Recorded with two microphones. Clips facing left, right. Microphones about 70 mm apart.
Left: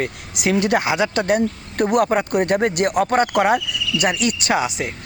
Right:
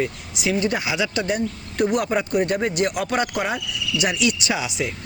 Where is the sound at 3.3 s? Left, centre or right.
Left.